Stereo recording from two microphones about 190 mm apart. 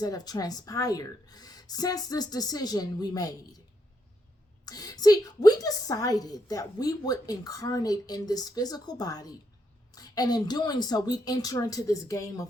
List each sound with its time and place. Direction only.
0.0 s a woman's voice: 20° left (ahead or behind)
4.6 s a woman's voice: 20° left (ahead or behind)